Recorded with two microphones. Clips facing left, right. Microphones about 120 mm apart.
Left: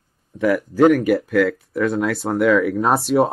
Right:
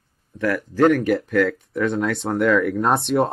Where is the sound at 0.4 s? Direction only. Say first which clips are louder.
Left 3 dB; 10° left (ahead or behind).